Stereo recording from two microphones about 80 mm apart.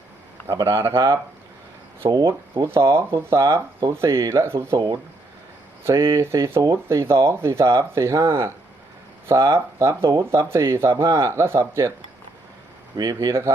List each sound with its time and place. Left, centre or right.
0.5 s speech: right
2.0 s speech: right
2.6 s speech: right
5.8 s speech: right
13.1 s speech: right